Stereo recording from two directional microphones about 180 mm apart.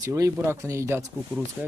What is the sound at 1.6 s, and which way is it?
Speech, 5° right (ahead or behind).